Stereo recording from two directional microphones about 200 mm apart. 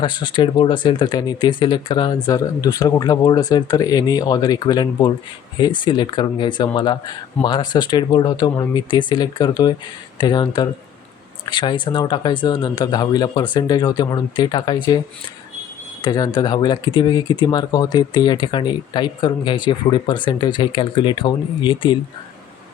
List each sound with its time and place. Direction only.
0.0 s speech: 25° left (ahead or behind)
16.0 s speech: 20° left (ahead or behind)